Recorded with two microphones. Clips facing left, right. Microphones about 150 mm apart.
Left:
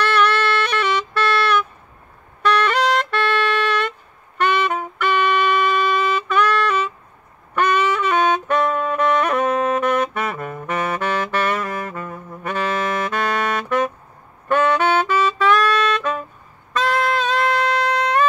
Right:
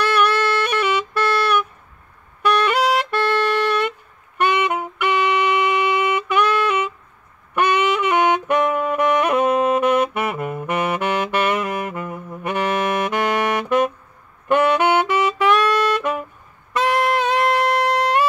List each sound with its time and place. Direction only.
0.0 s music: 10° right (ahead or behind)
4.4 s music: 15° right (ahead or behind)
7.5 s saxophone: 15° right (ahead or behind)
16.7 s music: 15° right (ahead or behind)